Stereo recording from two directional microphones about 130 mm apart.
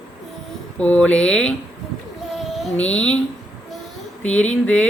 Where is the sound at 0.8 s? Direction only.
10° left (ahead or behind).